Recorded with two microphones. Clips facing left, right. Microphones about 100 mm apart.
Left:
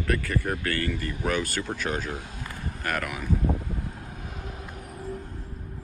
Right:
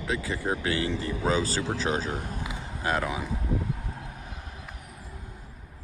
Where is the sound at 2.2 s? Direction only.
45° right (ahead or behind).